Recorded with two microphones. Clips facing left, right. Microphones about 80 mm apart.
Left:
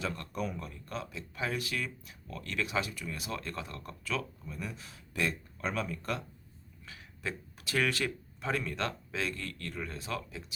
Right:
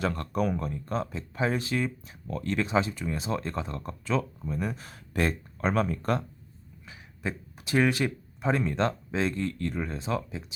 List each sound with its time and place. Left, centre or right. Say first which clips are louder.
0.0 s speech: right 8 dB; right
0.7 s speech: right 9 dB; right
4.5 s speech: right 9 dB; right
6.8 s speech: right 5 dB; right